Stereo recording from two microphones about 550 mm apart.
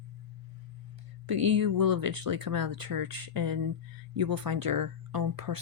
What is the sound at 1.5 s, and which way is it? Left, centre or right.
Speech, right.